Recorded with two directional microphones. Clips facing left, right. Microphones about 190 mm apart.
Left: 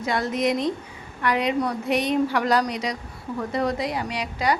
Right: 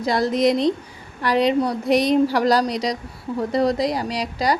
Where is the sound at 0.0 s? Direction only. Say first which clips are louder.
Right 5 dB; 35° right (ahead or behind).